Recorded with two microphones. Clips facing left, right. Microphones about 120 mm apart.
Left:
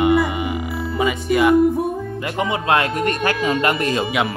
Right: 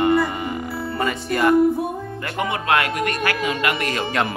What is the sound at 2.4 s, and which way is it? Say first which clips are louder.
Speech: left 2 dB; 20° left (ahead or behind).